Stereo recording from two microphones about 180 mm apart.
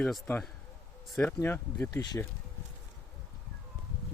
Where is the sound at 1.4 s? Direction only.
15° left (ahead or behind).